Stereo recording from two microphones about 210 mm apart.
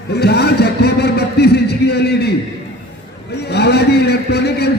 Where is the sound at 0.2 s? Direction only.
50° left (ahead or behind).